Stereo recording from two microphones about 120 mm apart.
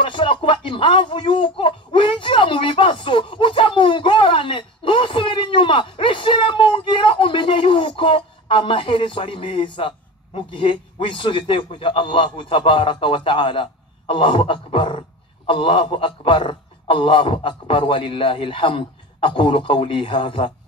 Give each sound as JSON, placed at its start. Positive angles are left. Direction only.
{"t": 0.0, "sound": "speech", "side_deg": 45}